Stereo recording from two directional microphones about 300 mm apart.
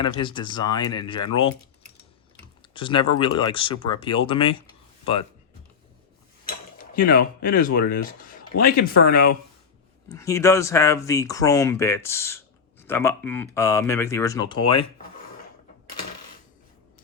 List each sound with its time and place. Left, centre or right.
0.0 s speech: centre
2.6 s typing: centre
3.2 s speech: centre
6.4 s speech: left
10.1 s speech: centre